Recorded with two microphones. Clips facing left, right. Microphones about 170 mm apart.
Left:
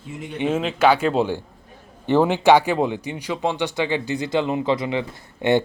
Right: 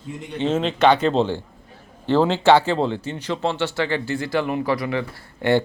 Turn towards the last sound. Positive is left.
turn(degrees=20)  # may be behind; listen again after turning